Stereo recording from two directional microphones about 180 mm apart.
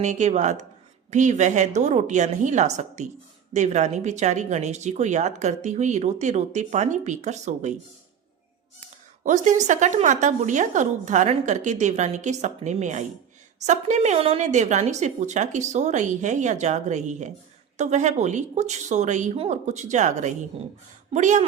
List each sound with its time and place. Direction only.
0.0 s speech: 40° right (ahead or behind)
9.2 s speech: 40° right (ahead or behind)